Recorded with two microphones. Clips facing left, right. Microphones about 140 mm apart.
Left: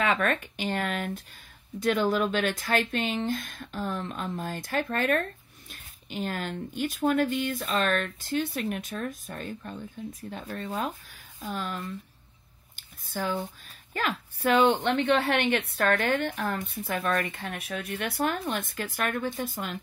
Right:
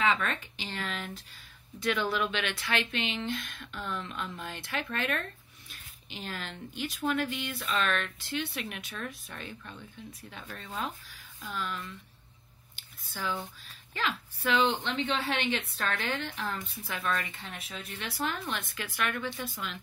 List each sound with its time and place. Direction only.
0.0 s speech: 55° left (ahead or behind)
12.7 s a sound: 45° left (ahead or behind)
13.9 s a woman's voice: 50° left (ahead or behind)